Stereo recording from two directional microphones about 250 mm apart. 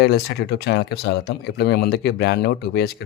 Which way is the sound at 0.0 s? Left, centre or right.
Left.